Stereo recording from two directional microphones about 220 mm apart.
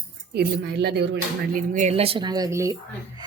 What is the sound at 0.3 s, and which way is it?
Speech, 50° right (ahead or behind).